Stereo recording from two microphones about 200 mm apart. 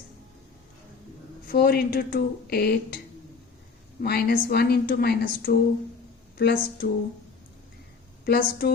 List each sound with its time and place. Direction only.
1.5 s a woman's voice: 50° left (ahead or behind)
4.0 s a woman's voice: 50° left (ahead or behind)
8.2 s a woman's voice: 50° left (ahead or behind)